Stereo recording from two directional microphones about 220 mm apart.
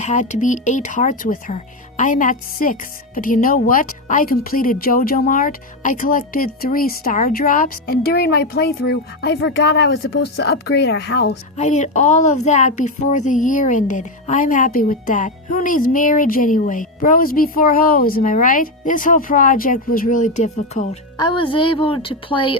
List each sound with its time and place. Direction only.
0.0 s a woman's voice: 35° left (ahead or behind); by 10.1 s 50° left (ahead or behind)
10.1 s speech: 60° left (ahead or behind)
11.5 s a woman's voice: 30° left (ahead or behind)
21.2 s a woman's voice: 20° left (ahead or behind)